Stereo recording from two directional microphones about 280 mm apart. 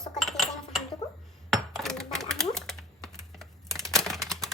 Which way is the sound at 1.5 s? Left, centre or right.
Centre.